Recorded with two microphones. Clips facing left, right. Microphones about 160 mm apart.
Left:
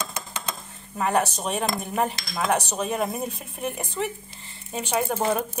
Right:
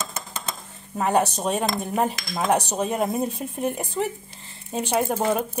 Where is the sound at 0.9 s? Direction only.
20° right (ahead or behind).